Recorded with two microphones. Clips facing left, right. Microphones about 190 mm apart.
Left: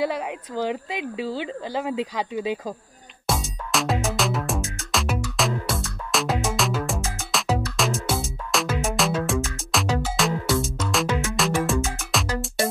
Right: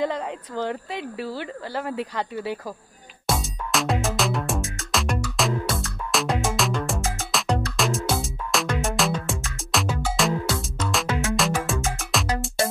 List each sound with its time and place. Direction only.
0.0 s a woman's voice: 10° left (ahead or behind)
3.3 s music: centre (ahead or behind)